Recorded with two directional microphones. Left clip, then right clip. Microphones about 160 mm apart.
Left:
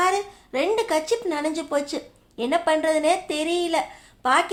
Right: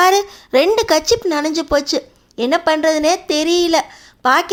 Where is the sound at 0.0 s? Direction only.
50° right (ahead or behind).